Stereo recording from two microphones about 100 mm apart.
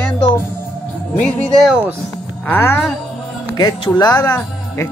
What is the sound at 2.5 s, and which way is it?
Speech, 20° left (ahead or behind).